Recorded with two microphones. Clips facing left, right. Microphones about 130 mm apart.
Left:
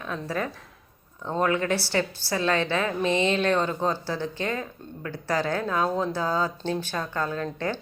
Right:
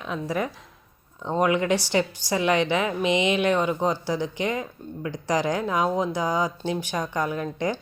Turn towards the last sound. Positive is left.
turn(degrees=-15)  # may be behind; listen again after turning